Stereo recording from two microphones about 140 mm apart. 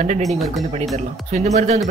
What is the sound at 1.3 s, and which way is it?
Speech, 55° right (ahead or behind).